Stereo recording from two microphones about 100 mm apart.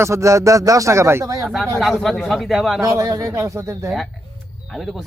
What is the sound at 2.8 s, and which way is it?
Speech, 35° right (ahead or behind).